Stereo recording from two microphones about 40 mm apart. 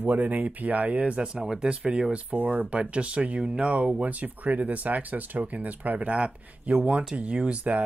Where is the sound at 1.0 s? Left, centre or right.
Right.